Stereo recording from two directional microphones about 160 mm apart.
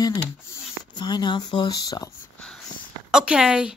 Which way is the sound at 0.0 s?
15° left (ahead or behind).